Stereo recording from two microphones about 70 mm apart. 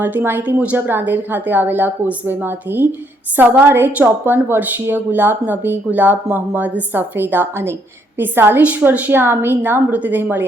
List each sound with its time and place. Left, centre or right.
0.0 s a woman's voice: right